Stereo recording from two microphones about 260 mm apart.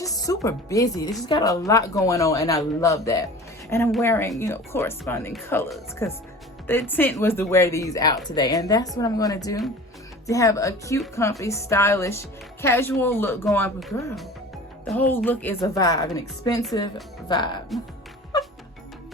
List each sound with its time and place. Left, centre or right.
0.0 s speech: centre